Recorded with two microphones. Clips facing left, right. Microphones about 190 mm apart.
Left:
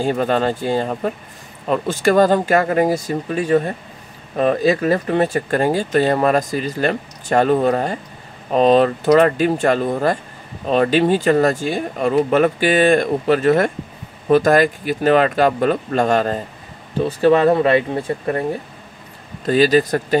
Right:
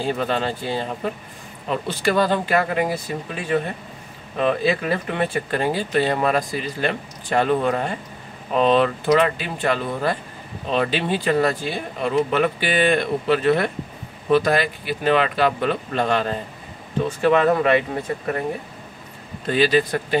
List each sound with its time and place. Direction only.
0.0 s speech: 45° left (ahead or behind)
19.4 s speech: 40° left (ahead or behind)